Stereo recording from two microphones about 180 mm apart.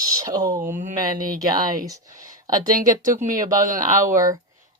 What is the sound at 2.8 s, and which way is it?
Speech, 45° right (ahead or behind).